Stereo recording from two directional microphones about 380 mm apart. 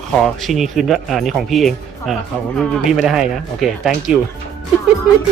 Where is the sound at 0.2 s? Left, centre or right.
Centre.